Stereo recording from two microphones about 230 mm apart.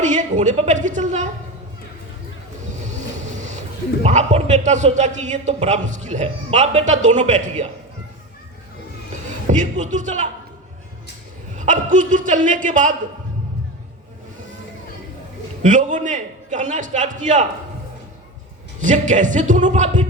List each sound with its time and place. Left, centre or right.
0.0 s a man's voice: right
4.0 s a man's voice: right
9.5 s a man's voice: right
11.5 s a man's voice: right
15.6 s a man's voice: right
18.8 s a man's voice: right